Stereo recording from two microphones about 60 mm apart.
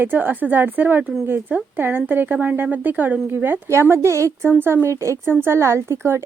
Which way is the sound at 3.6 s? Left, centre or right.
Right.